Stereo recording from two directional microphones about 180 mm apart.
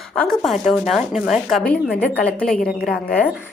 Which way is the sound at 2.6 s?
50° left (ahead or behind).